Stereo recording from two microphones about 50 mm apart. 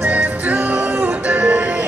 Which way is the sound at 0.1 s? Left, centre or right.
Right.